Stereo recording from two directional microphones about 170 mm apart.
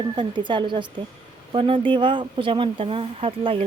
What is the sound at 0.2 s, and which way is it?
Speech, 30° right (ahead or behind).